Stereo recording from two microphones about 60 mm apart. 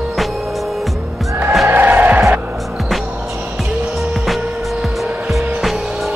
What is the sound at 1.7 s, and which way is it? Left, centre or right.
Music, right.